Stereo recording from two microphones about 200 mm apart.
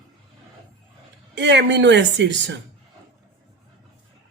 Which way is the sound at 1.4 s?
60° right (ahead or behind).